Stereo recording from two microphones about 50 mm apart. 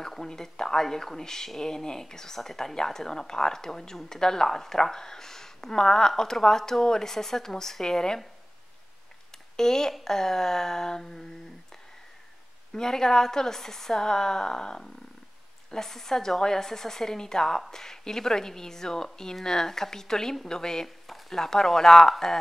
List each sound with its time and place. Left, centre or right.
0.0 s speech: centre
9.6 s speech: centre
12.7 s speech: centre